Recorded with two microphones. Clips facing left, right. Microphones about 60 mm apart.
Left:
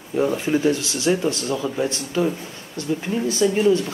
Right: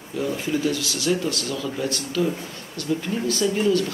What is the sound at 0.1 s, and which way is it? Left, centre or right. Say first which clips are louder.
Speech: left 5 dB; left.